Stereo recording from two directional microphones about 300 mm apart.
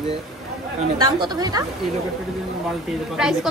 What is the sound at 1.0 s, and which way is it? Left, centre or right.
Speech, centre.